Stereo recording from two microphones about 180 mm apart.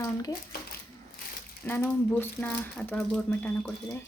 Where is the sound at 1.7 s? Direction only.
10° left (ahead or behind).